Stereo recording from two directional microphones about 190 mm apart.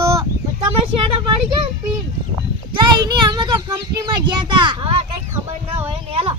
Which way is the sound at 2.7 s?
20° right (ahead or behind).